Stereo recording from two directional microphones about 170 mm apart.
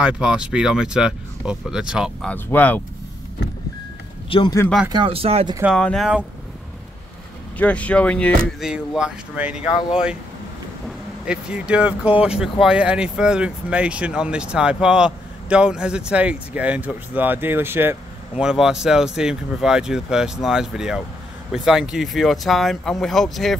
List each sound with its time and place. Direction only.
0.0 s speech: 5° right (ahead or behind)
2.2 s speech: 10° left (ahead or behind)
4.3 s speech: 30° left (ahead or behind)
4.8 s speech: 30° right (ahead or behind)
5.8 s speech: 5° left (ahead or behind)
7.5 s speech: 10° left (ahead or behind)
8.5 s speech: 5° right (ahead or behind)
11.2 s speech: 5° right (ahead or behind)